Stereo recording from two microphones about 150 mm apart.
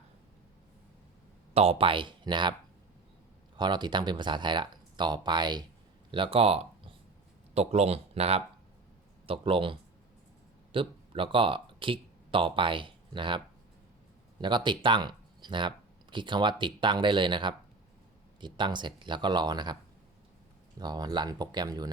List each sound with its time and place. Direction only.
1.5 s speech: 40° right (ahead or behind)
3.6 s speech: 30° right (ahead or behind)
14.4 s speech: 30° right (ahead or behind)
20.7 s speech: 25° right (ahead or behind)